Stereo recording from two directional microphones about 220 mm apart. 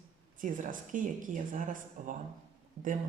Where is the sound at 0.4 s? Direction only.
35° right (ahead or behind).